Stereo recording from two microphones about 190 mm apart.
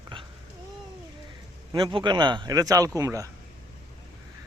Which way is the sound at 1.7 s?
25° right (ahead or behind).